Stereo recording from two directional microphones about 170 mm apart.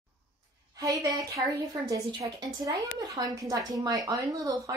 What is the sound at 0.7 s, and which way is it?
Speech, 20° right (ahead or behind).